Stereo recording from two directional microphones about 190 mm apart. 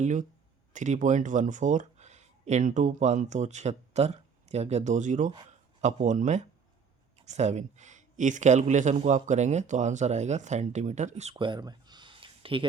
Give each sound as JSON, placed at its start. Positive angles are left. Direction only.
{"t": 0.0, "sound": "speech", "side_deg": -40}